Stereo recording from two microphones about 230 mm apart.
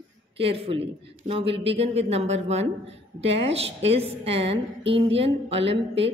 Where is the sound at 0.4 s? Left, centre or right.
Right.